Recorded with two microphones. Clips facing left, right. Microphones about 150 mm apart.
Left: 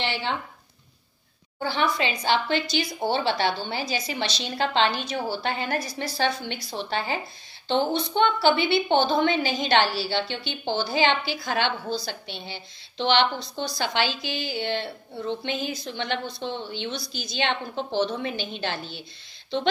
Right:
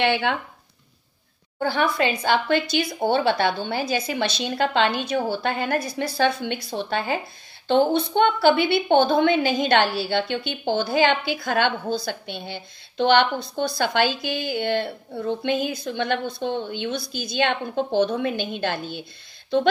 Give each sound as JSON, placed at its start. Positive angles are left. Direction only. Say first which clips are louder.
{"t": 0.0, "sound": "speech", "louder": "right 7 dB", "side_deg": -60}
{"t": 1.6, "sound": "speech", "louder": "right 3 dB", "side_deg": -55}